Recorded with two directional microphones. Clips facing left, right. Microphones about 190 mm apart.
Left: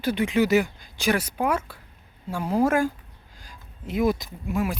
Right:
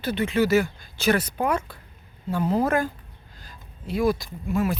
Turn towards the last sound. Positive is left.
turn(degrees=15)  # may be behind; listen again after turning